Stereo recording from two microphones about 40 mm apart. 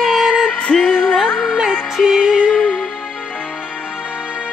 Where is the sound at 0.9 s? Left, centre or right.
Centre.